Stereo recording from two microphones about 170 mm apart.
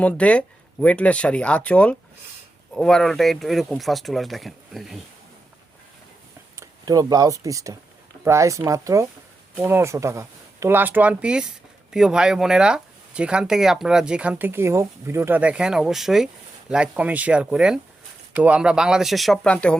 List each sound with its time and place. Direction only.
0.0 s speech: 5° left (ahead or behind)
6.6 s speech: 20° right (ahead or behind); by 19.7 s 5° left (ahead or behind)